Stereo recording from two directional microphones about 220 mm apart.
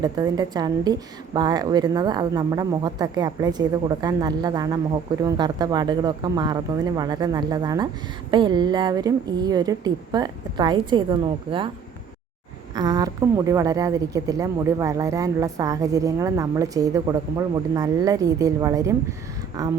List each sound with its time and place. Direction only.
0.0 s a woman's voice: 15° right (ahead or behind)
12.7 s a woman's voice: 20° right (ahead or behind)